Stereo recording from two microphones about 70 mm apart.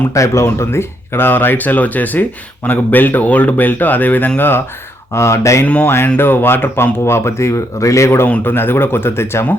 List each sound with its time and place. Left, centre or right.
0.1 s speech: left
0.4 s speech: left
5.1 s speech: left
5.6 s speech: left
6.1 s speech: left
8.3 s speech: left